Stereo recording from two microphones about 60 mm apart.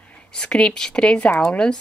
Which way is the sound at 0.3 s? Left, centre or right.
Centre.